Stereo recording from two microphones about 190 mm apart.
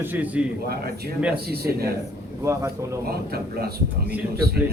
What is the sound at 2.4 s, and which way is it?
Speech, 15° right (ahead or behind).